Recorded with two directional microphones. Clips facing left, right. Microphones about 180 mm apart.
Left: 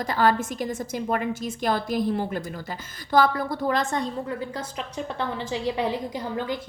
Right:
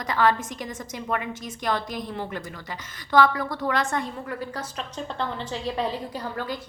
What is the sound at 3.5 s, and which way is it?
A woman's voice, 25° left (ahead or behind).